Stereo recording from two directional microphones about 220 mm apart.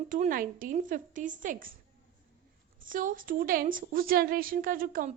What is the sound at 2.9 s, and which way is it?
A woman's voice, 40° right (ahead or behind).